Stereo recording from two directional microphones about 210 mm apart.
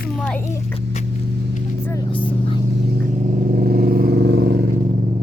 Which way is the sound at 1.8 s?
15° left (ahead or behind).